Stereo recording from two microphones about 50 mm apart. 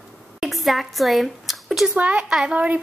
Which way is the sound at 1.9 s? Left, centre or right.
Right.